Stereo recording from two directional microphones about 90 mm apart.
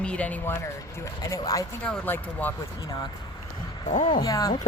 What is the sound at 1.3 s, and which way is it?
Speech, 40° left (ahead or behind).